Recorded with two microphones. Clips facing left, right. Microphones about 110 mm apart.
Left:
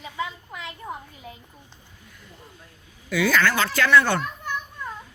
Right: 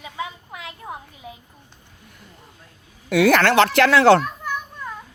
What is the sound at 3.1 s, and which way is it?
Speech, 65° right (ahead or behind).